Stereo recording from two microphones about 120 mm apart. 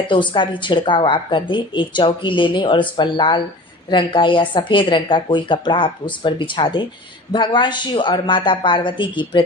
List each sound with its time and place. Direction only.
0.0 s a woman's voice: 45° left (ahead or behind)